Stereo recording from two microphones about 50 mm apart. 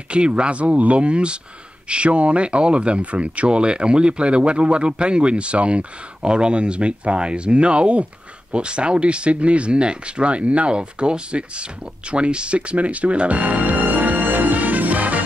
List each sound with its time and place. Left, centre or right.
0.1 s speech: right